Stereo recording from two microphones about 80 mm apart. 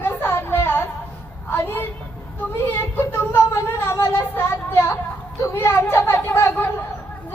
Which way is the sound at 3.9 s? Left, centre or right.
Left.